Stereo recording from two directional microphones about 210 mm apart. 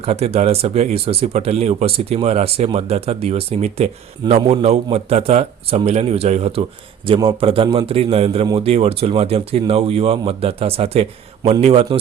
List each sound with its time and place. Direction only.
0.0 s speech: 30° right (ahead or behind)